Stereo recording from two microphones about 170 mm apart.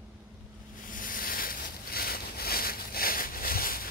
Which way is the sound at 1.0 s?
55° left (ahead or behind).